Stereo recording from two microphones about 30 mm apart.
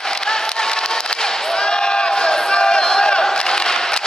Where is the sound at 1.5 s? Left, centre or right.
Left.